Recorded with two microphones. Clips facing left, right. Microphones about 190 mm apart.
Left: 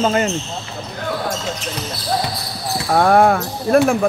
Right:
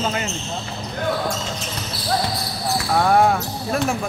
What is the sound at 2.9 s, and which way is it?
Speech, 55° left (ahead or behind).